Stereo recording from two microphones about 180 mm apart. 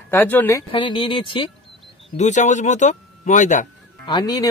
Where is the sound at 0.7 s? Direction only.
25° left (ahead or behind).